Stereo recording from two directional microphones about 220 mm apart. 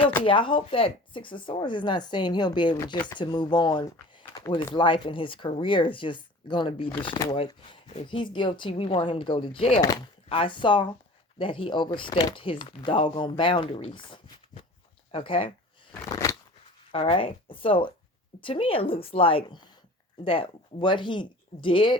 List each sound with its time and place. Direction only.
0.2 s speech: 25° left (ahead or behind)
16.0 s scissors: 15° left (ahead or behind)
16.9 s speech: 25° left (ahead or behind)